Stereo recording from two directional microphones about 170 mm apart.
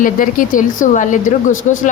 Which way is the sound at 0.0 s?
50° left (ahead or behind).